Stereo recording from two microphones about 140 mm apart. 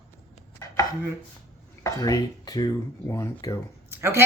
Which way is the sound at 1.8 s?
25° left (ahead or behind).